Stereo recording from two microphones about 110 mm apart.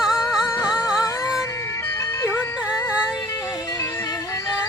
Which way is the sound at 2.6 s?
10° right (ahead or behind).